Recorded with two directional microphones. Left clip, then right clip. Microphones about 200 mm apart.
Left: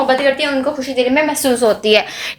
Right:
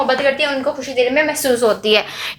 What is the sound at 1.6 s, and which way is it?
Speech, 15° left (ahead or behind).